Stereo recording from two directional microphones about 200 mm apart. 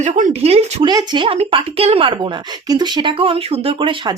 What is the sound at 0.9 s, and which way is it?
A woman's voice, 20° right (ahead or behind).